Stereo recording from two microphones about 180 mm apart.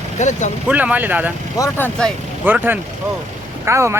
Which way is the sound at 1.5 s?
20° left (ahead or behind).